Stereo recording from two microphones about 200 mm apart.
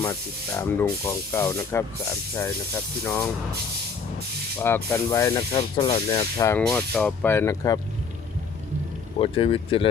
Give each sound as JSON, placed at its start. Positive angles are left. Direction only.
{"t": 0.0, "sound": "speech", "side_deg": 10}
{"t": 3.0, "sound": "speech", "side_deg": 15}
{"t": 4.6, "sound": "speech", "side_deg": 10}
{"t": 5.5, "sound": "speech", "side_deg": 25}
{"t": 9.1, "sound": "speech", "side_deg": 25}